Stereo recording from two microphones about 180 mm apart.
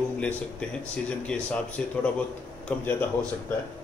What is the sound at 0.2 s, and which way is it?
Speech, 5° left (ahead or behind).